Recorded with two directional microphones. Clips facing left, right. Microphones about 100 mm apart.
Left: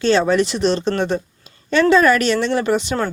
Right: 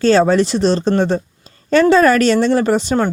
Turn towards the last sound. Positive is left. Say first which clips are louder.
# right 4 dB
turn(degrees=-35)  # may be behind; listen again after turning